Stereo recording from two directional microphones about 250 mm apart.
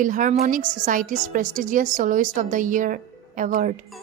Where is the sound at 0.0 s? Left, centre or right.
Right.